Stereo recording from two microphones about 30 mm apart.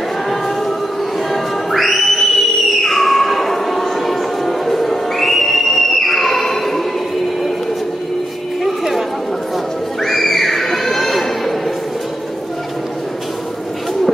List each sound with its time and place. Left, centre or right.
1.3 s music: centre
2.8 s a sound: centre
10.0 s neigh: centre